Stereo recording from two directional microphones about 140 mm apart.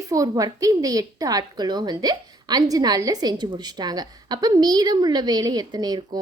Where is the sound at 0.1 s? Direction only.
25° right (ahead or behind).